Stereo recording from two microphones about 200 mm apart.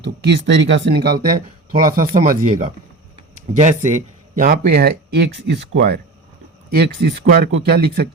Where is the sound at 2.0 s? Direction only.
40° right (ahead or behind).